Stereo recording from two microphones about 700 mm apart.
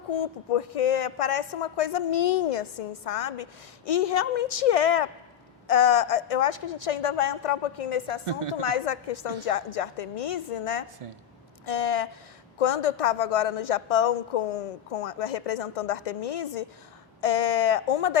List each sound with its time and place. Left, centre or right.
0.2 s a woman's voice: left